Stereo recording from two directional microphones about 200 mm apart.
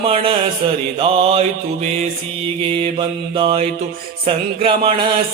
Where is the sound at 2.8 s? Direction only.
25° right (ahead or behind).